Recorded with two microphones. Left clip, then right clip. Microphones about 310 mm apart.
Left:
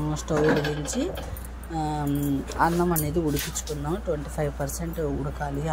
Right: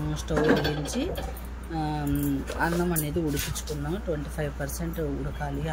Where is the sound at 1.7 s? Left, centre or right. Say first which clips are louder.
Left 2 dB; centre.